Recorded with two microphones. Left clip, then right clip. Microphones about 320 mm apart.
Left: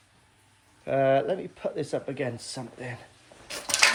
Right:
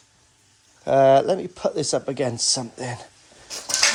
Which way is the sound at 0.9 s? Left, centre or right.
Centre.